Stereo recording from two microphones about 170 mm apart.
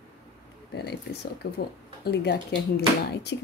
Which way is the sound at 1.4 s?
70° left (ahead or behind).